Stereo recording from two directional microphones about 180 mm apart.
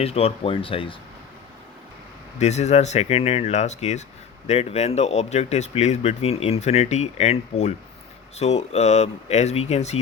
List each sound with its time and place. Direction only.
0.0 s speech: 35° left (ahead or behind)
2.4 s speech: 40° left (ahead or behind)